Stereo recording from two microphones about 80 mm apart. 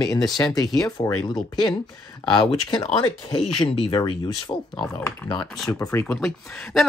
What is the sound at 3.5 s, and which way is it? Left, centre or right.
Speech, left.